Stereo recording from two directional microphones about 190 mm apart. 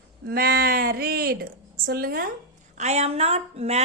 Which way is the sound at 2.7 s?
35° right (ahead or behind).